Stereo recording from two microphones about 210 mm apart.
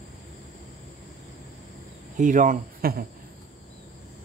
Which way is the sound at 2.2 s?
40° right (ahead or behind).